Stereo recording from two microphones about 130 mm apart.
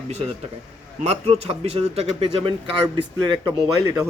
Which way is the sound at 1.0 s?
55° right (ahead or behind).